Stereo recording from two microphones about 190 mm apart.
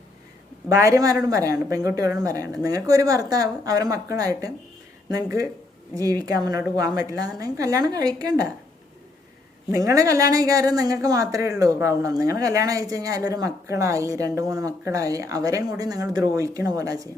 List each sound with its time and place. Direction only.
0.7 s speech: 15° right (ahead or behind)
9.7 s speech: 15° right (ahead or behind)